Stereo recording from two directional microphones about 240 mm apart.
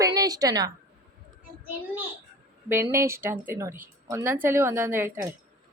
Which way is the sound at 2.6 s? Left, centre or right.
Centre.